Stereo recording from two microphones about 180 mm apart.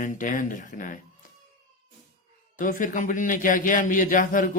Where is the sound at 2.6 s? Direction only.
45° left (ahead or behind).